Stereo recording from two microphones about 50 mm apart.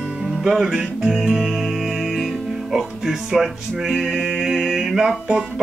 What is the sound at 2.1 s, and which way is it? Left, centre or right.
Music, centre.